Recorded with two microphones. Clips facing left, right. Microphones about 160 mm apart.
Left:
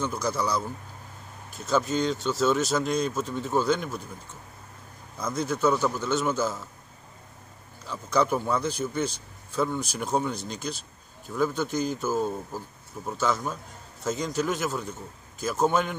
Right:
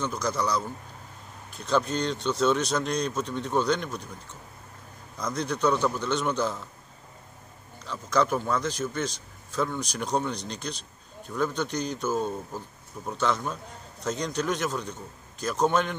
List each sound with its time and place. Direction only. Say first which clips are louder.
0.0 s a man's voice: even; 10° left (ahead or behind)
5.1 s speech: left 1 dB; 5° left (ahead or behind)
7.8 s a man's voice: even; 10° left (ahead or behind)